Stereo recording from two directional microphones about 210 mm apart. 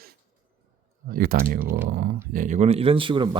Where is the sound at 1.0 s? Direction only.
45° right (ahead or behind); by 3.4 s 25° right (ahead or behind).